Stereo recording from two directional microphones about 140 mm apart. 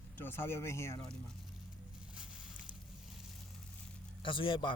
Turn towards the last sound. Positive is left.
turn(degrees=40)  # may be behind; listen again after turning